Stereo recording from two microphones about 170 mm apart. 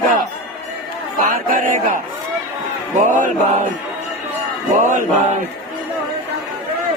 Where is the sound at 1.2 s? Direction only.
50° right (ahead or behind).